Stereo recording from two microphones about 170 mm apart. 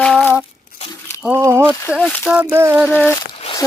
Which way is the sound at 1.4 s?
15° right (ahead or behind).